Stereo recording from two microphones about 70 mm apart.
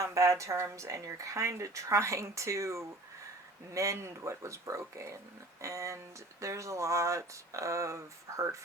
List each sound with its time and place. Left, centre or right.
0.0 s speech: right